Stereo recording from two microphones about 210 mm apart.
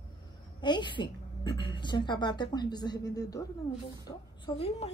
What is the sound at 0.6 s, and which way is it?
A woman's voice, 20° left (ahead or behind).